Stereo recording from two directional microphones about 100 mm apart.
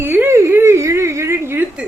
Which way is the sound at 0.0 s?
20° right (ahead or behind).